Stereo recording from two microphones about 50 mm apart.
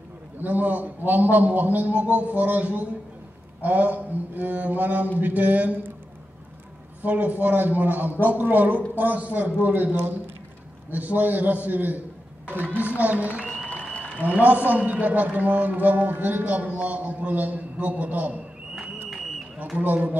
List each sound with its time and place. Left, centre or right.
0.4 s a man's voice: right
7.0 s a man's voice: right
13.7 s applause: left
14.4 s a man's voice: right
19.0 s a sound: centre
19.8 s a man's voice: right